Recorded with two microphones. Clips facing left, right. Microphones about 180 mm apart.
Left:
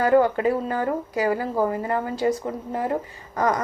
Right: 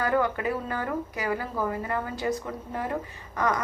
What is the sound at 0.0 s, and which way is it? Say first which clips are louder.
A woman's voice: left 7 dB; 30° left (ahead or behind).